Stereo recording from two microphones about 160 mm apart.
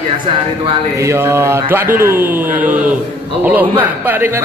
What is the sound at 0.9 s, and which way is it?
A man's voice, 15° right (ahead or behind).